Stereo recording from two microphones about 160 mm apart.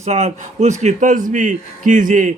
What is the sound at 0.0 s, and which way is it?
A man's voice, 45° right (ahead or behind).